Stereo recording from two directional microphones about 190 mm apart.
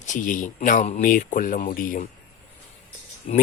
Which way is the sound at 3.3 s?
35° left (ahead or behind).